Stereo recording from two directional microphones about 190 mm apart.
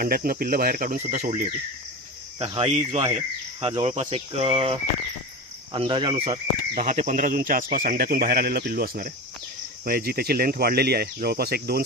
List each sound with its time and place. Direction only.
0.0 s speech: 50° right (ahead or behind); by 6.4 s 30° right (ahead or behind)
6.7 s speech: 40° right (ahead or behind); by 11.8 s 55° right (ahead or behind)